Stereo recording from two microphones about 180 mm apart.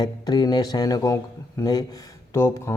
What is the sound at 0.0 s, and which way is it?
Speech, 20° left (ahead or behind).